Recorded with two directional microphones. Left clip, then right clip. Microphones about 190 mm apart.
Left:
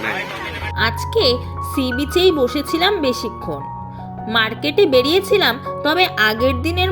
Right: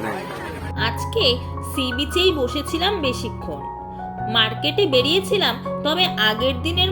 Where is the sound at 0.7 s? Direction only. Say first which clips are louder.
Left 4 dB; 40° left (ahead or behind).